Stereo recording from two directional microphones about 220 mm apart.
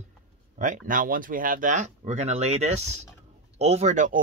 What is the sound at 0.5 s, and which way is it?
Speech, 35° right (ahead or behind).